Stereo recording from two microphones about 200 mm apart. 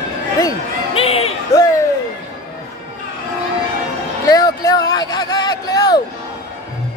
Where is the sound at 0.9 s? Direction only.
30° left (ahead or behind).